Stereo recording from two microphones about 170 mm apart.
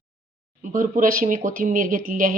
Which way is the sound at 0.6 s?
50° right (ahead or behind).